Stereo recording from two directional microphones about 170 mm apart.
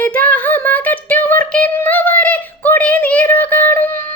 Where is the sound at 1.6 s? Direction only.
10° left (ahead or behind).